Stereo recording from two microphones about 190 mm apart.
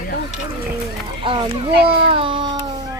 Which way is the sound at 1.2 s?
25° right (ahead or behind).